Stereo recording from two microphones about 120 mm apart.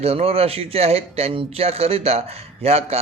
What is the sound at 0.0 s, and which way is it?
A man's voice, 55° right (ahead or behind).